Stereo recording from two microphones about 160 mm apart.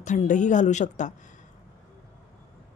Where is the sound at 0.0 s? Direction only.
50° left (ahead or behind).